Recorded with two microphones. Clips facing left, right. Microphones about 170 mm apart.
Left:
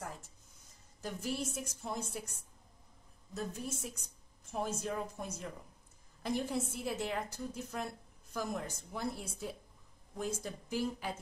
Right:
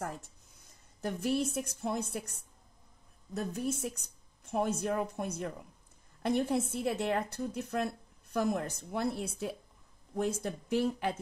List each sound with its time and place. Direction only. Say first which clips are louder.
1.0 s a woman's voice: right 7 dB; 60° right (ahead or behind)
3.3 s a woman's voice: right 6 dB; 65° right (ahead or behind)